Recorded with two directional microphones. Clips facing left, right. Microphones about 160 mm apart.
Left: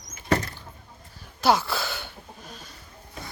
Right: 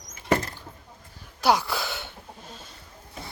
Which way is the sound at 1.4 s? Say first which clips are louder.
Left 1 dB; 15° right (ahead or behind).